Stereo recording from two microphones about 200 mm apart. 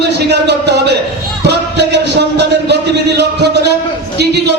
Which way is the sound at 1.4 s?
55° right (ahead or behind).